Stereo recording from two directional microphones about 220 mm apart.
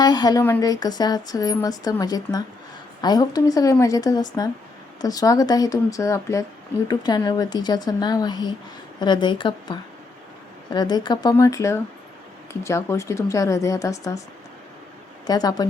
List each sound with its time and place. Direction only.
0.0 s a woman's voice: 20° left (ahead or behind)
15.3 s speech: 15° left (ahead or behind)